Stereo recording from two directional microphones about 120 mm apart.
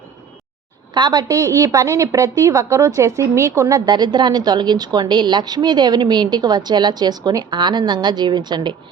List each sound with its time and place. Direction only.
0.9 s a woman's voice: 40° right (ahead or behind)
3.8 s a woman's voice: 40° right (ahead or behind)